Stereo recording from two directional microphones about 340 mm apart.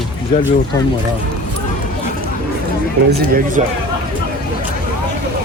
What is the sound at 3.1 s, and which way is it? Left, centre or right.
Speech, right.